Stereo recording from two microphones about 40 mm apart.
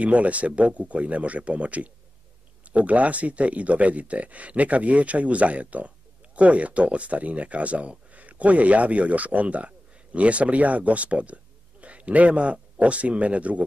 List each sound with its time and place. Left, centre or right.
0.0 s a man's voice: right